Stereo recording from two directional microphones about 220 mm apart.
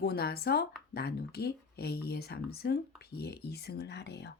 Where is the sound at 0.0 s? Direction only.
45° left (ahead or behind).